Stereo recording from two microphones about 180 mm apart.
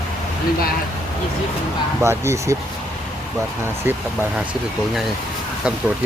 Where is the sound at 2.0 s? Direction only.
15° right (ahead or behind).